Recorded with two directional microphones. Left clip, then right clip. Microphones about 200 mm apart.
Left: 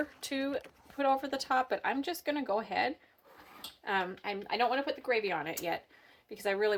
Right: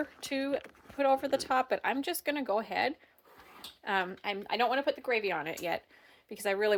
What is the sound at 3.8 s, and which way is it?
Speech, 55° right (ahead or behind).